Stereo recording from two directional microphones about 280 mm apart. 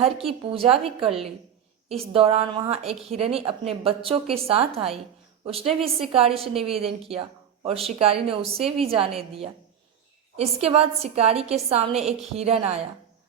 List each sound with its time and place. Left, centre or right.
0.0 s a woman's voice: right